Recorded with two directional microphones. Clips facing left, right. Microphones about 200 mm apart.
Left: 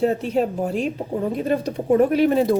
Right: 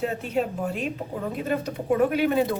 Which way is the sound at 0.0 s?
35° left (ahead or behind).